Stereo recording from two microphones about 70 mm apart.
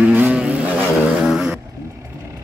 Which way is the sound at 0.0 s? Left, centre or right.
Centre.